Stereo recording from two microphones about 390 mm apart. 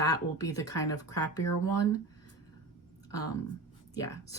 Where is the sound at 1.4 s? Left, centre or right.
Left.